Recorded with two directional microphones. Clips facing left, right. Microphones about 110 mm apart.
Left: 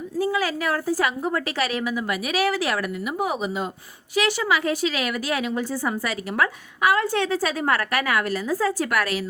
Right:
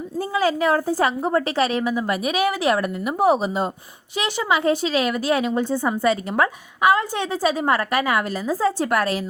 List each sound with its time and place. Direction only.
0.2 s speech: 30° right (ahead or behind)
4.1 s speech: 20° right (ahead or behind)